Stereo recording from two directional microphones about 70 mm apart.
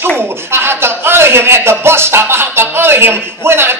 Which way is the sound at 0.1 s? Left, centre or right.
Right.